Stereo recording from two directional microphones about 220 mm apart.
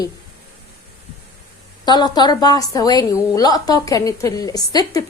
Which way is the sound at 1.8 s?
20° left (ahead or behind).